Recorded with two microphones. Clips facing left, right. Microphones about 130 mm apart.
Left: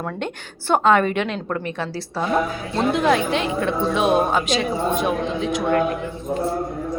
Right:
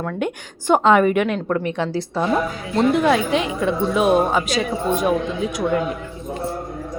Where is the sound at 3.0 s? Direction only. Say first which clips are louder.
Right 1 dB; 5° right (ahead or behind).